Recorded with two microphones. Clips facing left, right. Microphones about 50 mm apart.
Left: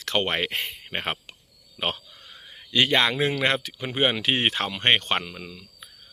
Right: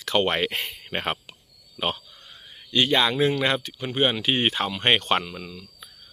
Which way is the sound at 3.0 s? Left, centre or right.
Left.